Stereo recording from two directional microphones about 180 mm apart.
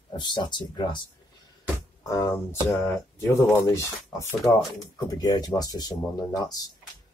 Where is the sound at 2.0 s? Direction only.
20° left (ahead or behind).